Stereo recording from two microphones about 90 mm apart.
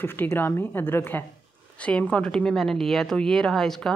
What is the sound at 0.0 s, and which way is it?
A woman's voice, 25° left (ahead or behind).